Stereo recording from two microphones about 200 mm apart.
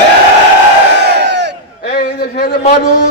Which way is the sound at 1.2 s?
60° right (ahead or behind).